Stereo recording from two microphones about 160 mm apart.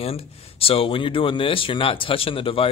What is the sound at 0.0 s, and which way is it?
Speech, 35° left (ahead or behind).